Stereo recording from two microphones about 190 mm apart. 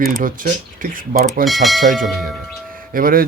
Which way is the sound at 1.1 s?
50° right (ahead or behind).